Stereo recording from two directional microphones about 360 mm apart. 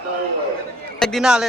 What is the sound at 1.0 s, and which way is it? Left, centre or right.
Speech, centre.